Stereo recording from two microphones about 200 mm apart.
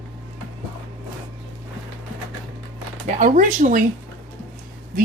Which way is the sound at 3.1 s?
40° right (ahead or behind).